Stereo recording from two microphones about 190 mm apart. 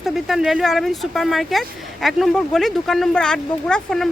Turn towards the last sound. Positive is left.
turn(degrees=5)  # may be behind; listen again after turning